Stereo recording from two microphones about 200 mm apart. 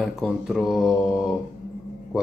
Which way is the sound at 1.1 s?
20° left (ahead or behind).